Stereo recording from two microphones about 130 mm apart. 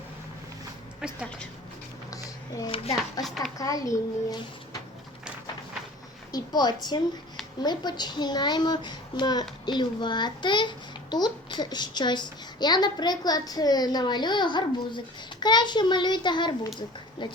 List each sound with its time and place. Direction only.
1.0 s a woman's voice: 5° right (ahead or behind)
2.6 s a child's voice: 45° left (ahead or behind)
3.2 s a child's voice: centre (ahead or behind)
3.6 s a child's voice: 25° left (ahead or behind)
6.3 s a child's voice: 30° left (ahead or behind)